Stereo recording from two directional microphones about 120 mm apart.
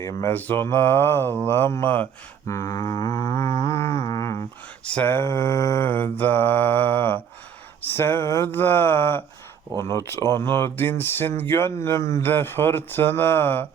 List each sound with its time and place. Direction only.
0.0 s mantra: 25° left (ahead or behind)
1.5 s speech: 20° left (ahead or behind)
4.9 s mantra: 15° left (ahead or behind)
9.7 s speech: 25° left (ahead or behind)